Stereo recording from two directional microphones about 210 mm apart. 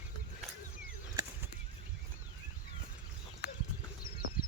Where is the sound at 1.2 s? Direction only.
15° right (ahead or behind).